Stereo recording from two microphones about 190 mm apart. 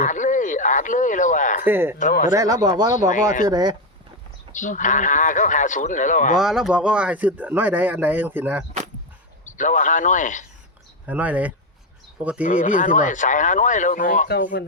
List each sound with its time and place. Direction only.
0.0 s a sound: 40° left (ahead or behind)
1.6 s speech: 10° right (ahead or behind)
2.0 s speech: 45° left (ahead or behind)
2.3 s speech: 20° right (ahead or behind)
4.5 s speech: 40° left (ahead or behind)
6.3 s speech: centre (ahead or behind)
9.5 s speech: 40° left (ahead or behind)
11.0 s speech: 10° right (ahead or behind)
12.4 s speech: 40° left (ahead or behind)